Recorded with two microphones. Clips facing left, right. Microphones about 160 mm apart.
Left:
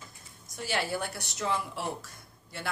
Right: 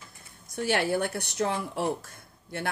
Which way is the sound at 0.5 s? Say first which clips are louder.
Right 6 dB; 55° right (ahead or behind).